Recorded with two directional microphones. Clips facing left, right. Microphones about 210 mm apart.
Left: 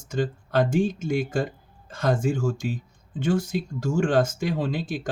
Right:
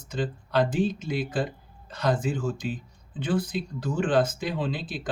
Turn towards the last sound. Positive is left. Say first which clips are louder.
# left 3 dB
turn(degrees=45)  # may be behind; listen again after turning